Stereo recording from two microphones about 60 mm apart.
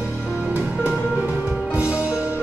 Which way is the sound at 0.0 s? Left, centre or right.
Centre.